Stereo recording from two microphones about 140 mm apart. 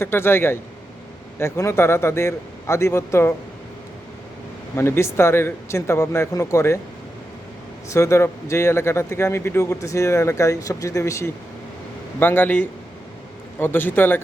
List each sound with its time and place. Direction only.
0.0 s a man's voice: 15° left (ahead or behind)
4.7 s a man's voice: 15° left (ahead or behind)
7.9 s a man's voice: 20° left (ahead or behind)